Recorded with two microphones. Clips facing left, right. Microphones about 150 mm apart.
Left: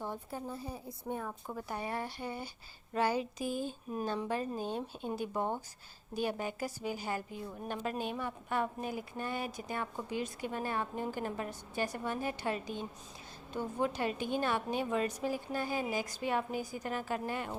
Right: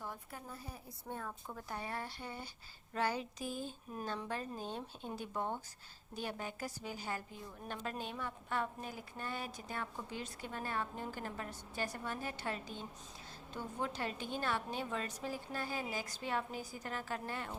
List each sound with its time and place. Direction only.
0.0 s a woman's voice: 30° left (ahead or behind)
1.0 s a woman's voice: 15° left (ahead or behind)